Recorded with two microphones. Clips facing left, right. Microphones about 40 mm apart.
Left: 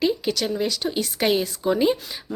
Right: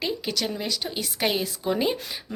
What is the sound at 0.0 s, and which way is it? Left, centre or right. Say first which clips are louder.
A woman's voice: left 5 dB; centre.